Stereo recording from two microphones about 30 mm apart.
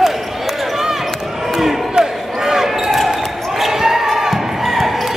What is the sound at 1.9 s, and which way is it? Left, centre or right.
Basketball bounce, centre.